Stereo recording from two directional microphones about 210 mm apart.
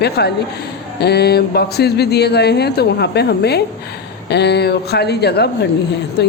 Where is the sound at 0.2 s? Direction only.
55° left (ahead or behind).